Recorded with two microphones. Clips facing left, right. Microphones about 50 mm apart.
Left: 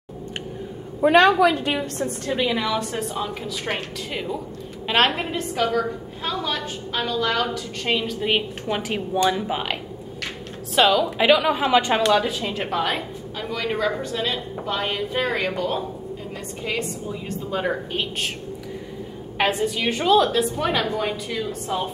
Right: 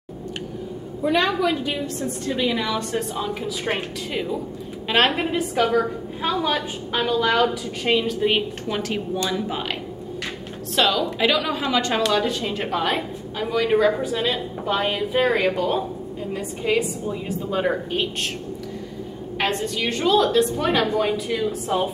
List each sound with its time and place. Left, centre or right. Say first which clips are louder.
1.1 s a woman's voice: left 5 dB; left
2.0 s a woman's voice: left 1 dB; centre
10.8 s a woman's voice: left 2 dB; centre
12.0 s a woman's voice: left 1 dB; centre
19.3 s a woman's voice: left 2 dB; centre